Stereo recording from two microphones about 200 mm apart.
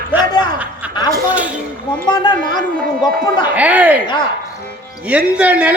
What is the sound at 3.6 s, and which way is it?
Speech, 10° right (ahead or behind).